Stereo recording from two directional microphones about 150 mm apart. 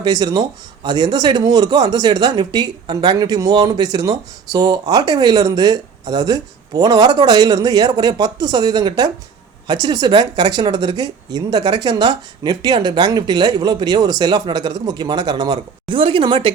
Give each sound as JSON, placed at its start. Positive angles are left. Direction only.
{"t": 0.0, "sound": "speech", "side_deg": -25}